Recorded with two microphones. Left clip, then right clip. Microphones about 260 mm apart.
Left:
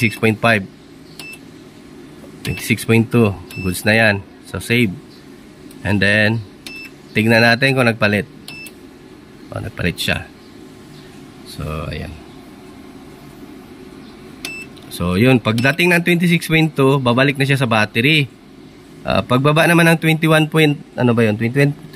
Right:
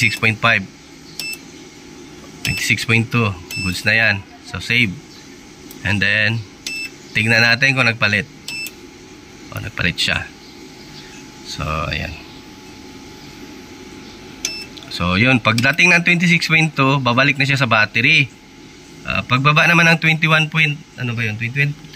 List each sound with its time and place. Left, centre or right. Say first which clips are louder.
0.0 s speech: right 1 dB; centre
2.5 s speech: right 1 dB; centre
9.5 s speech: right 2 dB; centre
11.4 s speech: right 5 dB; centre
14.9 s speech: even; centre